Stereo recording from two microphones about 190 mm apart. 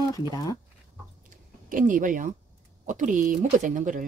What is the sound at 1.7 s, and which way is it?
Speech, 45° right (ahead or behind).